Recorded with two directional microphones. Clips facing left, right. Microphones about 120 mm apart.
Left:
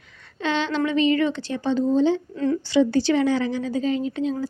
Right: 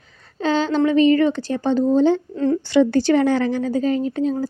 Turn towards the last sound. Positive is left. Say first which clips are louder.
# right 4 dB
turn(degrees=-45)  # may be behind; listen again after turning